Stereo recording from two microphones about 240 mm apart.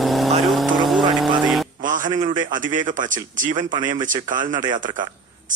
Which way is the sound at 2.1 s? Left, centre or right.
Right.